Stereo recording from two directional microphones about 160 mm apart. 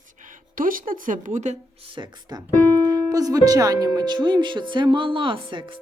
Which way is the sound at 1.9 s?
30° right (ahead or behind).